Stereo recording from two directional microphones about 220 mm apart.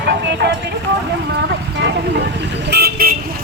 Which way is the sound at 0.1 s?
50° right (ahead or behind).